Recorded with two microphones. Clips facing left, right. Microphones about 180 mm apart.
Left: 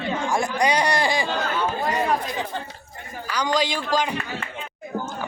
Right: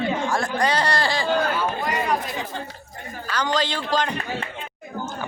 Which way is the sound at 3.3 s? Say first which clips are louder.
Left 1 dB; 10° left (ahead or behind).